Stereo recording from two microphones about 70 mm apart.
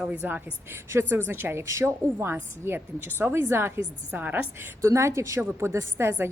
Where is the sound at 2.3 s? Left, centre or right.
Right.